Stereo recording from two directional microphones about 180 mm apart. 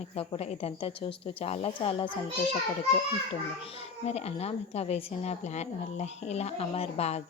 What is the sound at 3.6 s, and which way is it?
A woman's voice, 35° left (ahead or behind).